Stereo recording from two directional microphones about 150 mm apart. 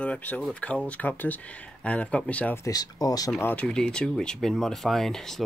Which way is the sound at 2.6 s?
25° left (ahead or behind).